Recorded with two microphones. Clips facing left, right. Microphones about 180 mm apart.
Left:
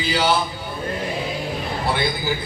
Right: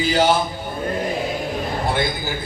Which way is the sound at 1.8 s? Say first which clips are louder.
Left 2 dB; 45° right (ahead or behind).